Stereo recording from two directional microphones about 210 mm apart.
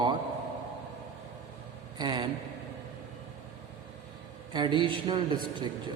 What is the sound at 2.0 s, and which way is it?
Vehicle, 20° right (ahead or behind).